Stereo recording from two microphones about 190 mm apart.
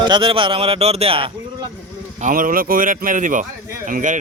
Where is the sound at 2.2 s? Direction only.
45° right (ahead or behind).